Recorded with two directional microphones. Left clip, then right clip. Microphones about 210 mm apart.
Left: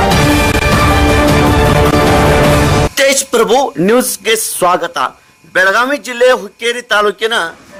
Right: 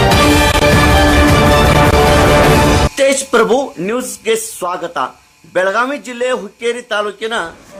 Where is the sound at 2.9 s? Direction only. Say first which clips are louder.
Left 2 dB; 30° left (ahead or behind).